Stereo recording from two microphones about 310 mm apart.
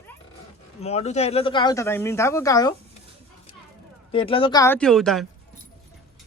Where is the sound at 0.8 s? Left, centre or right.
Centre.